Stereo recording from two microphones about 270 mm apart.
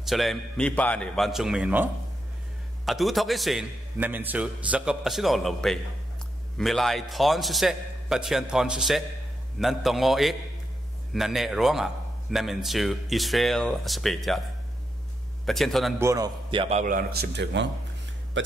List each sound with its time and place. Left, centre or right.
0.0 s a man's voice: centre
15.4 s a man's voice: centre
16.1 s a man's voice: centre; by 17.6 s right